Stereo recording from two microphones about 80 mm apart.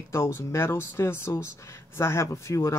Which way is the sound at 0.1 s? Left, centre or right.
Left.